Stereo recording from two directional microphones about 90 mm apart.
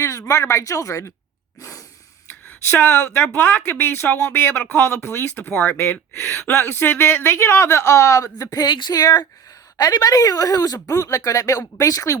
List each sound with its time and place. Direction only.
0.0 s speech: 35° left (ahead or behind)
2.8 s speech: 20° left (ahead or behind)
8.6 s speech: 55° left (ahead or behind)